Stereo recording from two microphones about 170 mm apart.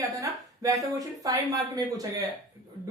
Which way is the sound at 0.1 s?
20° right (ahead or behind).